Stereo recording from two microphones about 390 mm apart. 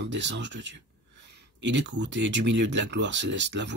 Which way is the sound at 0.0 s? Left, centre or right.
Right.